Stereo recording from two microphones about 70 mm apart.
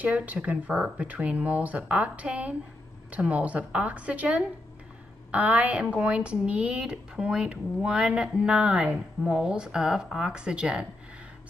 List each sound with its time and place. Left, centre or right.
0.0 s speech: right